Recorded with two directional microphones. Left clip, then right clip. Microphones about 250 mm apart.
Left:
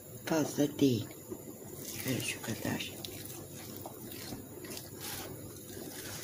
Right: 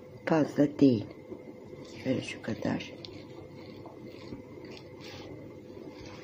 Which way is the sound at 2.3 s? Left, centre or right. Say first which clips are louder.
Right 3 dB; centre.